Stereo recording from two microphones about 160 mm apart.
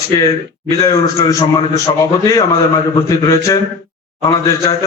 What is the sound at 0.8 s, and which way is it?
A man's voice, 20° left (ahead or behind).